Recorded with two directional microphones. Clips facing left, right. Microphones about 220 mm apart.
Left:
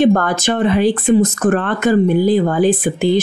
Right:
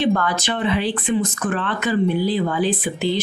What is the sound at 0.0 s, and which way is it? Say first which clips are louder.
Speech: left 7 dB; 45° left (ahead or behind).